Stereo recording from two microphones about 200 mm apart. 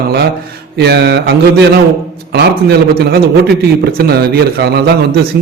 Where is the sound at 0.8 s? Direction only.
55° right (ahead or behind).